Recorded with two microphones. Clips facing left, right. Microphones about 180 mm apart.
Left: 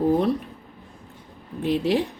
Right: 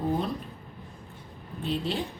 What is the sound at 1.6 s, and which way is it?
Speech, 75° left (ahead or behind).